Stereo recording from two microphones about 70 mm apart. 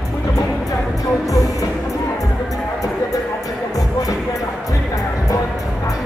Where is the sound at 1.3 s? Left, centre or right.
Left.